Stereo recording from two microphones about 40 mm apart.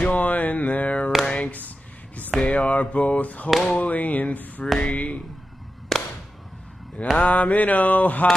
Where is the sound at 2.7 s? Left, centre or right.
Left.